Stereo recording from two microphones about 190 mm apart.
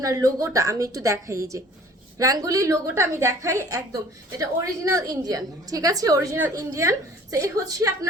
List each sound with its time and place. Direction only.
0.0 s a woman's voice: 20° right (ahead or behind)